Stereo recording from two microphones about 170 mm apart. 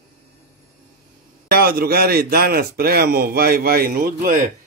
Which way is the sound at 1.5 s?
60° right (ahead or behind).